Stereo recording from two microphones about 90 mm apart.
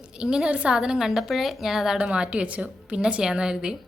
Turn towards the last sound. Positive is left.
turn(degrees=-10)  # may be behind; listen again after turning